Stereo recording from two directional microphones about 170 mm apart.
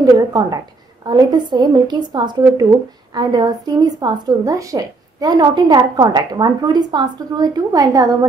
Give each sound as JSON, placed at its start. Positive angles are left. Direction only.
{"t": 0.0, "sound": "a woman's voice", "side_deg": -20}